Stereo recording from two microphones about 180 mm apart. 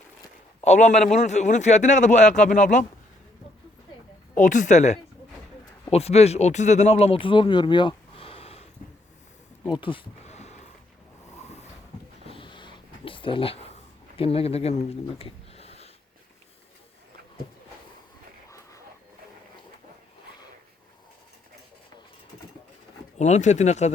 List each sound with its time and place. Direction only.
0.6 s a man's voice: 40° left (ahead or behind)
4.4 s speech: 45° left (ahead or behind)
9.6 s a sound: 25° left (ahead or behind)
12.3 s a sound: 25° left (ahead or behind)
14.2 s speech: 30° left (ahead or behind)
23.1 s a man's voice: 40° left (ahead or behind)